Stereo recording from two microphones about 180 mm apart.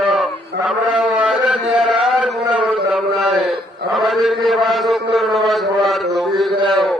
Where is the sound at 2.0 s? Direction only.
5° right (ahead or behind).